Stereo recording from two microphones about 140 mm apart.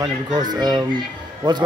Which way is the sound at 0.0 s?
30° right (ahead or behind).